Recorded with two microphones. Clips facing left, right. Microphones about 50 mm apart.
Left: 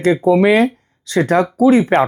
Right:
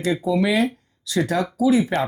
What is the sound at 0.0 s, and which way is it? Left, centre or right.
Speech, left.